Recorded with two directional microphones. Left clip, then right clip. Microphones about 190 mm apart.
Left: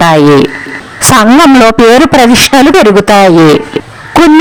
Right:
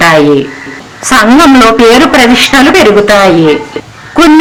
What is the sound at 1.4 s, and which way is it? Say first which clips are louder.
Speech: even; 45° left (ahead or behind).